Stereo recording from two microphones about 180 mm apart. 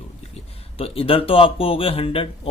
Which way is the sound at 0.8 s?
30° left (ahead or behind).